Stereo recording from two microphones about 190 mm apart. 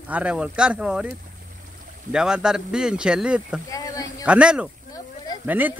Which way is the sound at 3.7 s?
20° left (ahead or behind).